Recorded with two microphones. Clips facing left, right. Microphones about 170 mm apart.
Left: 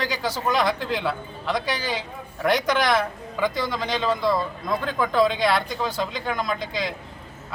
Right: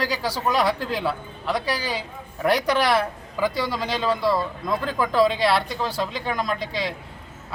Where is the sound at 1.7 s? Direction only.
35° right (ahead or behind).